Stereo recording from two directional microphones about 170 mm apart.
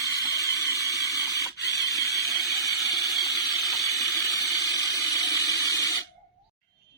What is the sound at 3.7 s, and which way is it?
Water, 20° left (ahead or behind).